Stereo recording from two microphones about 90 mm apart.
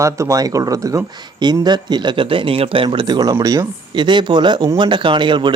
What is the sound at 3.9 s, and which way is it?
A man's voice, 60° right (ahead or behind).